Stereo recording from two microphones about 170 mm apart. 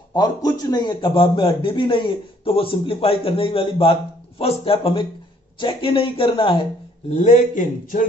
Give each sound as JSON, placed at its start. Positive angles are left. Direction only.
{"t": 0.1, "sound": "a man's voice", "side_deg": 25}
{"t": 7.1, "sound": "a man's voice", "side_deg": 45}